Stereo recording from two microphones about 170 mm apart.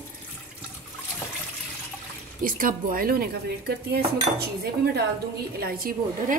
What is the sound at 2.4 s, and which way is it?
A woman's voice, 55° right (ahead or behind).